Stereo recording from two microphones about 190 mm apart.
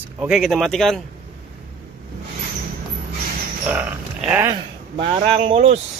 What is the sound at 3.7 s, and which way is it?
Speech, 10° right (ahead or behind).